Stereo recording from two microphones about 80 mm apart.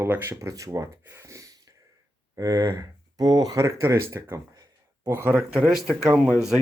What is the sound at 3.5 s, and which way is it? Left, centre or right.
Speech, right.